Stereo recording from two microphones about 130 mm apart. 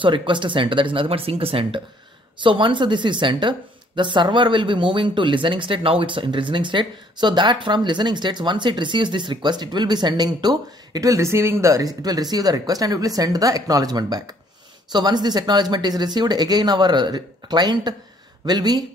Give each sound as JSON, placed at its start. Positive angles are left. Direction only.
{"t": 0.0, "sound": "speech", "side_deg": -40}